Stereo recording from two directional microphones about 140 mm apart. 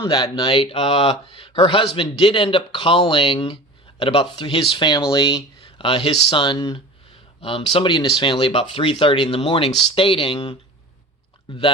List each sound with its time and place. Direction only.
0.0 s speech: 30° left (ahead or behind)